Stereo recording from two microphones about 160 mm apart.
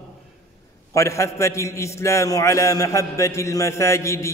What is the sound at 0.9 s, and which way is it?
A man's voice, 20° left (ahead or behind).